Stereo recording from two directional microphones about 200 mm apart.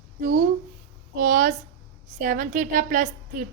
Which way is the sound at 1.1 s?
40° right (ahead or behind).